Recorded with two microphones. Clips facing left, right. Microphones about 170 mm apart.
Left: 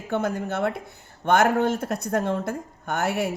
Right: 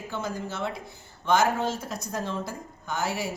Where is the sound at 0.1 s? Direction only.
60° left (ahead or behind).